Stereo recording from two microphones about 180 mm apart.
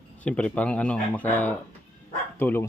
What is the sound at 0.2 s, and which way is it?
Speech, 5° left (ahead or behind).